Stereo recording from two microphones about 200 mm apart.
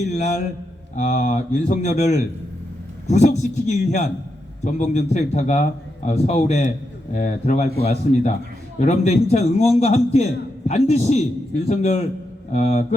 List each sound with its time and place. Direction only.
0.0 s a man's voice: 35° left (ahead or behind)